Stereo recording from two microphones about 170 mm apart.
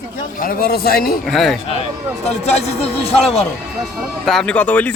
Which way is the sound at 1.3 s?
Centre (ahead or behind).